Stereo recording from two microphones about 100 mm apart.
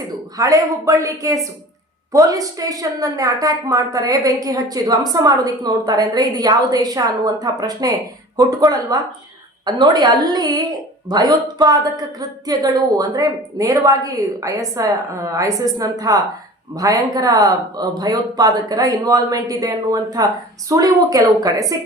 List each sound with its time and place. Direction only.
0.3 s a woman's voice: 35° right (ahead or behind)